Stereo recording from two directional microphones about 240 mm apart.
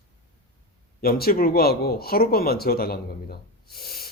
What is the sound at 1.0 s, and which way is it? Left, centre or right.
Speech, left.